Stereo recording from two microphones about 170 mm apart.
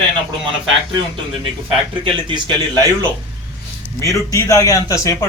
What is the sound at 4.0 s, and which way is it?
A man's voice, 20° left (ahead or behind).